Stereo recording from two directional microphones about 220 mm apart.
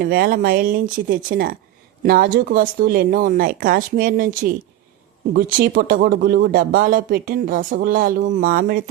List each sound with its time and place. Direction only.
0.0 s speech: 40° right (ahead or behind)
5.3 s speech: 45° right (ahead or behind)